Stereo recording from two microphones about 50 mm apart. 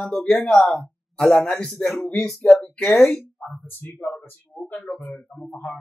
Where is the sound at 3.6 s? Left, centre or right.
Left.